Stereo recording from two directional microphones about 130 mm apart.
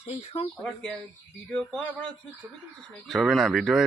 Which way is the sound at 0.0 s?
55° left (ahead or behind).